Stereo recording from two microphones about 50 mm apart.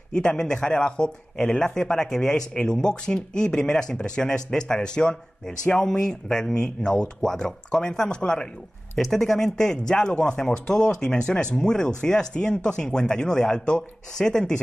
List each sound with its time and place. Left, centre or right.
0.1 s speech: centre
8.9 s speech: centre